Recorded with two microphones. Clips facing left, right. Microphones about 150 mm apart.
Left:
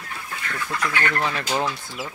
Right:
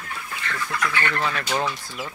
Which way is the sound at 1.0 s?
15° left (ahead or behind).